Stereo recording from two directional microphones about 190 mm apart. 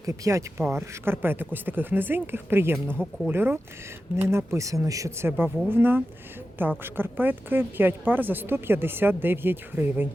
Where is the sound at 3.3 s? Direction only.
10° right (ahead or behind).